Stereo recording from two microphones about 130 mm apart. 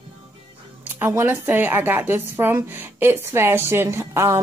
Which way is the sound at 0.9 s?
15° right (ahead or behind).